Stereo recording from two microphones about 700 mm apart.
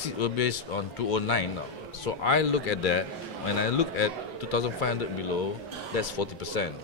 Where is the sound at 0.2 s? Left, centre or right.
Left.